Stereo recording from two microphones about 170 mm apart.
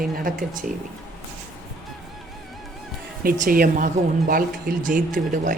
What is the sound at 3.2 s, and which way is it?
Speech, 55° right (ahead or behind).